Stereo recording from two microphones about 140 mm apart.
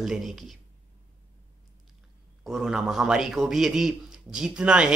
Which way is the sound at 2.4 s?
5° right (ahead or behind).